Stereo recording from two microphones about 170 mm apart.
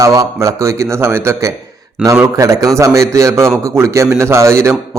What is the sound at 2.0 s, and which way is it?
Speech, 5° right (ahead or behind).